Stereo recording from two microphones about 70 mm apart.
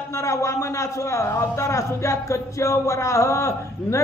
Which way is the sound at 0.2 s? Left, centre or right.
Left.